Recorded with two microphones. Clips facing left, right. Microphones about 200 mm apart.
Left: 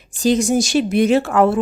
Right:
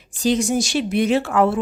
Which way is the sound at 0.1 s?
45° left (ahead or behind).